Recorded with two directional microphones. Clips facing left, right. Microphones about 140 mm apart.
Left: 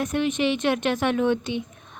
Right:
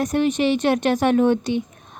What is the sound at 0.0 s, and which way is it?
A woman's voice, 40° right (ahead or behind).